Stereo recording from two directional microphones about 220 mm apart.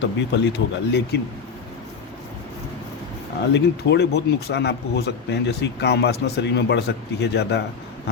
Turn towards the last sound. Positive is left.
turn(degrees=50)  # may be behind; listen again after turning